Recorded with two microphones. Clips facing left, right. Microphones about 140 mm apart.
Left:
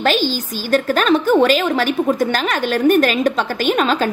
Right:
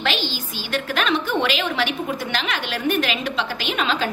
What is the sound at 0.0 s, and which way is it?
A woman's voice, 45° left (ahead or behind).